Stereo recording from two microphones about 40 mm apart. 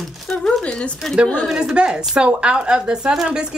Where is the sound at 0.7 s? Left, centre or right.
Left.